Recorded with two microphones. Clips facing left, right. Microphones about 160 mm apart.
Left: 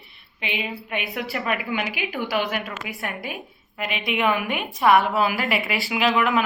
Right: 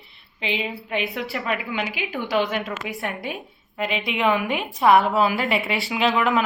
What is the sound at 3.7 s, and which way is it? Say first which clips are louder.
A woman's voice: right 1 dB; 30° right (ahead or behind).